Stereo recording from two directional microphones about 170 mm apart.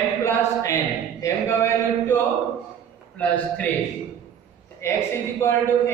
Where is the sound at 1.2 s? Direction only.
15° left (ahead or behind).